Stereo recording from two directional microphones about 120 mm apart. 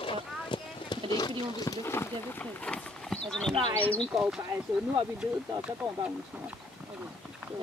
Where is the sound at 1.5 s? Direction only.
30° left (ahead or behind); by 4.1 s 10° left (ahead or behind).